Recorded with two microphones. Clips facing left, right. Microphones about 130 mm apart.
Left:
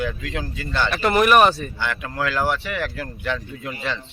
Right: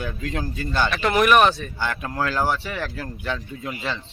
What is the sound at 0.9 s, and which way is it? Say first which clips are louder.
Speech: left 2 dB; 5° left (ahead or behind).